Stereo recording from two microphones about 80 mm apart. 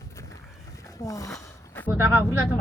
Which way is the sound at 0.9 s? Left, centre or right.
Left.